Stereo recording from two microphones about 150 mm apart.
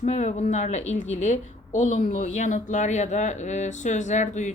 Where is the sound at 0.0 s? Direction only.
50° left (ahead or behind).